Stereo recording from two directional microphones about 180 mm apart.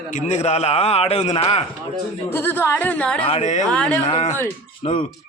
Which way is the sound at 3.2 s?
35° left (ahead or behind).